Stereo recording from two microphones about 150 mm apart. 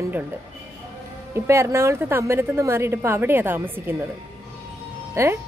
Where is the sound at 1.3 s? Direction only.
20° right (ahead or behind).